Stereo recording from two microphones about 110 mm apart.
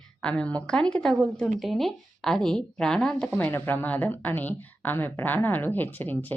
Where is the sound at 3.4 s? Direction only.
20° left (ahead or behind).